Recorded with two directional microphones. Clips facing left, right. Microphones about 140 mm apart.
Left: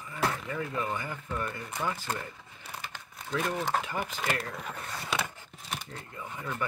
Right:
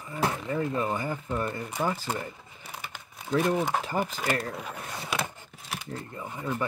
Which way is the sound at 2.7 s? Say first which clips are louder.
Right 1 dB; 10° right (ahead or behind).